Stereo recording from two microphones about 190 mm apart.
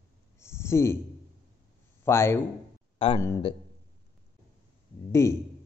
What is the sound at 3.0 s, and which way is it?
Speech, 30° left (ahead or behind).